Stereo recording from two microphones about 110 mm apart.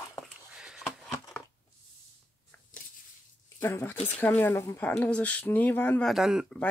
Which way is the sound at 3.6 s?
20° left (ahead or behind).